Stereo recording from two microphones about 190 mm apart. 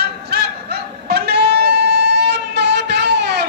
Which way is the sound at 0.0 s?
60° right (ahead or behind).